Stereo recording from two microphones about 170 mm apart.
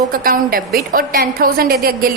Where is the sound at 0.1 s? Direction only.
60° right (ahead or behind).